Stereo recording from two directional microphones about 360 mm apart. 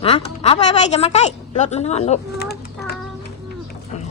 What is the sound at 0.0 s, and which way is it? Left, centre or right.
A woman's voice, centre.